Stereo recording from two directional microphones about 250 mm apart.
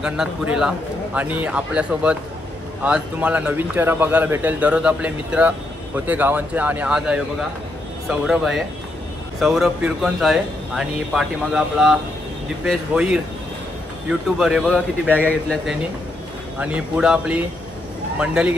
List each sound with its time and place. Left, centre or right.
0.0 s speech: centre